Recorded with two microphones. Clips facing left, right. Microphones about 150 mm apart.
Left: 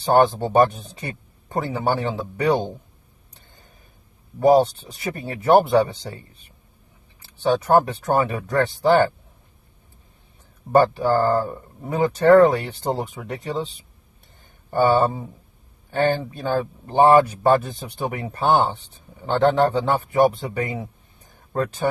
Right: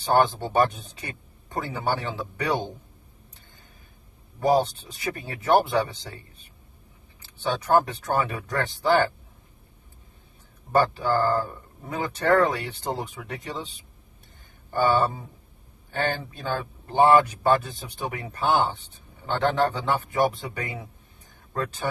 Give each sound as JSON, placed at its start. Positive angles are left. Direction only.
{"t": 0.0, "sound": "speech", "side_deg": 35}
{"t": 4.4, "sound": "speech", "side_deg": 35}
{"t": 7.3, "sound": "speech", "side_deg": 30}
{"t": 10.8, "sound": "speech", "side_deg": 30}
{"t": 14.7, "sound": "speech", "side_deg": 30}